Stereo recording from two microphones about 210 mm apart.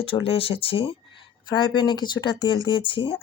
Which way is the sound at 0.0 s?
25° left (ahead or behind).